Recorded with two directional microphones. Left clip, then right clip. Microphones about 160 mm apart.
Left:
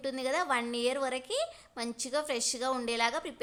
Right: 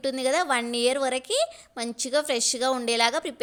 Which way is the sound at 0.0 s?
30° right (ahead or behind).